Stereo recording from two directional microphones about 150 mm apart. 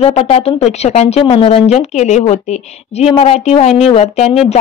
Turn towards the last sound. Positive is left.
turn(degrees=45)  # may be behind; listen again after turning